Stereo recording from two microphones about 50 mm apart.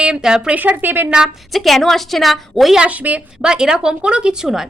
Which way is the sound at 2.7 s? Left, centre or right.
Right.